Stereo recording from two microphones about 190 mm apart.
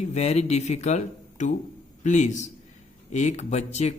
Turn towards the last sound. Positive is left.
turn(degrees=35)  # may be behind; listen again after turning